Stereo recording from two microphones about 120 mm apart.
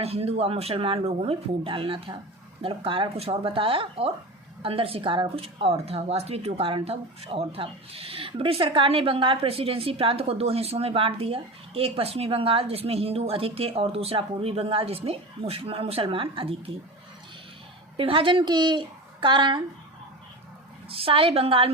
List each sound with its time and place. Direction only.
0.0 s speech: 55° right (ahead or behind)
17.9 s a woman's voice: 50° right (ahead or behind)
20.9 s speech: 50° right (ahead or behind)